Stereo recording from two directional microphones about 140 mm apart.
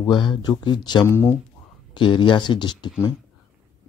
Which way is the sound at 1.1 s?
20° left (ahead or behind).